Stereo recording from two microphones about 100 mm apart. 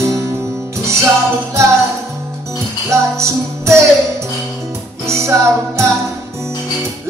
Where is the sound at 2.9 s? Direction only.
30° right (ahead or behind).